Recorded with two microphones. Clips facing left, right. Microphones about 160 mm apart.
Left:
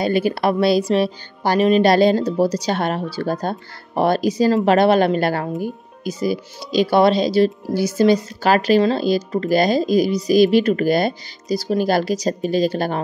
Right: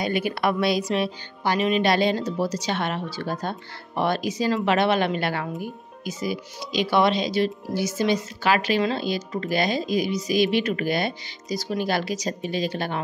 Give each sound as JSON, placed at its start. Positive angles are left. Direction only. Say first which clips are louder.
{"t": 0.0, "sound": "speech", "louder": "left 6 dB", "side_deg": 30}